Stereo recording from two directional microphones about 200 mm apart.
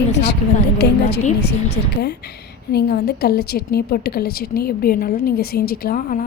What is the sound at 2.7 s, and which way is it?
A woman's voice, 55° left (ahead or behind).